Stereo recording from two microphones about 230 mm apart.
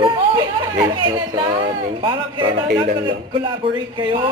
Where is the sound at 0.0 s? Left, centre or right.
Right.